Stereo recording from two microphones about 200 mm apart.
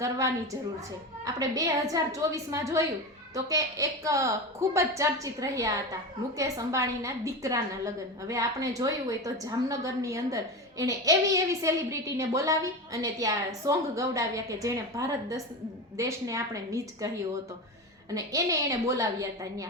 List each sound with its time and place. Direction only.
1.2 s a woman's voice: 15° right (ahead or behind)
18.1 s a woman's voice: 15° right (ahead or behind)